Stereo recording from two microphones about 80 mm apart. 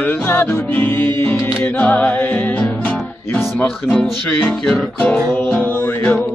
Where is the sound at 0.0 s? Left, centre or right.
Left.